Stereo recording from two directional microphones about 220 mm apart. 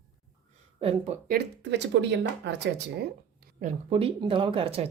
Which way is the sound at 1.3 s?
50° right (ahead or behind).